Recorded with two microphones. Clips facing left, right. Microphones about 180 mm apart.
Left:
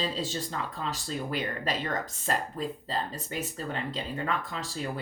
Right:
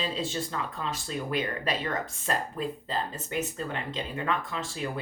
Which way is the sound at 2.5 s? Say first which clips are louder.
Right 1 dB; 35° left (ahead or behind).